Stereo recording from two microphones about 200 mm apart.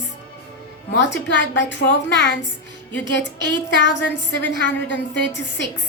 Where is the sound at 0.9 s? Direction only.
65° left (ahead or behind).